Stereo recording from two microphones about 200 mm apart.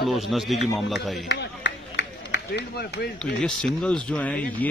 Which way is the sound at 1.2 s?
60° left (ahead or behind).